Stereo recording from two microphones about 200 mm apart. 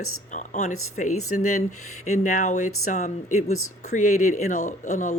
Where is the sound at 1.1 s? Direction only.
90° left.